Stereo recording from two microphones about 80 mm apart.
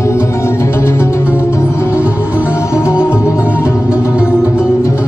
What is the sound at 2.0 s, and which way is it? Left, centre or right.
Music, centre.